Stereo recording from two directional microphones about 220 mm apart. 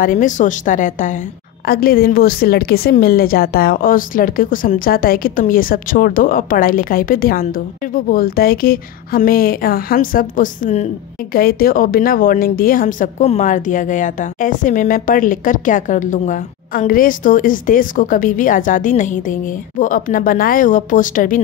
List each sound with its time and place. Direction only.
0.0 s a woman's voice: 35° left (ahead or behind)